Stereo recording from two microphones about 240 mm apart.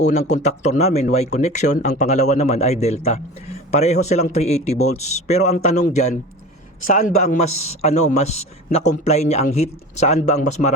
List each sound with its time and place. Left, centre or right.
0.0 s a man's voice: left